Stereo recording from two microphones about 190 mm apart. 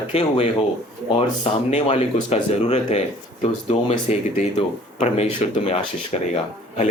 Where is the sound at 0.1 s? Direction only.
35° left (ahead or behind).